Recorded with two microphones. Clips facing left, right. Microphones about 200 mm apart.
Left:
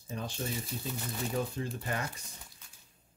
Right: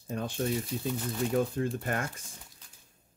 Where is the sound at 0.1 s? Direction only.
55° right (ahead or behind).